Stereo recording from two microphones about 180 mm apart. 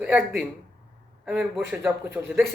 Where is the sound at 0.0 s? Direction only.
10° right (ahead or behind).